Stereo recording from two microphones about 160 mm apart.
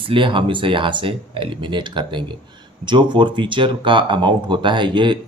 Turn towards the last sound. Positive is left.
turn(degrees=-30)  # may be behind; listen again after turning